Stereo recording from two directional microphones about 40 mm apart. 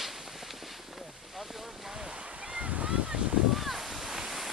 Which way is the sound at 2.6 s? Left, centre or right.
Right.